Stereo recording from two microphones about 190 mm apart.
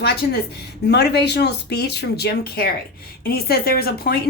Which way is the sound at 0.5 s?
60° left (ahead or behind).